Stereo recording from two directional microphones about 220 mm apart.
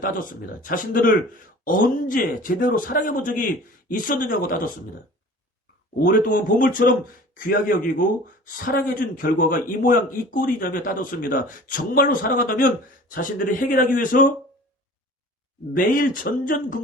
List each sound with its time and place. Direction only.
0.0 s a man's voice: 35° left (ahead or behind)
6.0 s a man's voice: 40° left (ahead or behind)
15.7 s a man's voice: 40° left (ahead or behind)